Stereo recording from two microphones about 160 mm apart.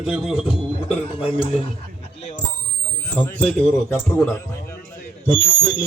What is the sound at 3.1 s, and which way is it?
Speech, 10° left (ahead or behind).